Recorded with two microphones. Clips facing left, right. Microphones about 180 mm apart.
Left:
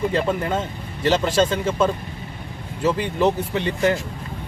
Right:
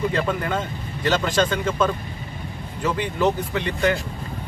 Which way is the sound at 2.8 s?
30° left (ahead or behind).